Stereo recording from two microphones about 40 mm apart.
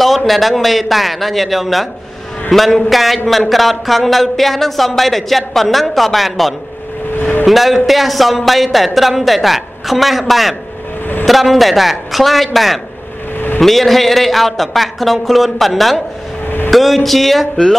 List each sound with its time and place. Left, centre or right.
0.3 s speech: centre
16.4 s vehicle: left
16.7 s speech: centre